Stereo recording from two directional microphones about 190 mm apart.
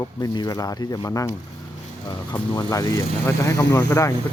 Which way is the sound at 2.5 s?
20° left (ahead or behind).